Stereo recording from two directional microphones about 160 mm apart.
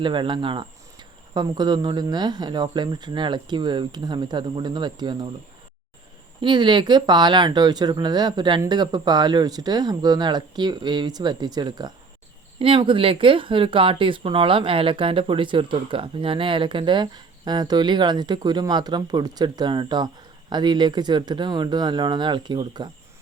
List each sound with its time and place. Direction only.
0.0 s speech: 30° right (ahead or behind)
6.4 s speech: 30° right (ahead or behind)